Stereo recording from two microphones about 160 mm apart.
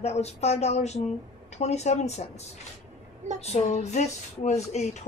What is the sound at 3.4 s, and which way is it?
Speech, 45° left (ahead or behind).